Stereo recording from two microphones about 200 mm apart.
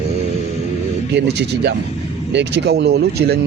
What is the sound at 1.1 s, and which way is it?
Speech, 55° right (ahead or behind).